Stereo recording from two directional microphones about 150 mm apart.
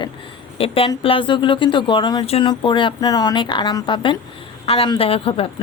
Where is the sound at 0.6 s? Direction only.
40° left (ahead or behind).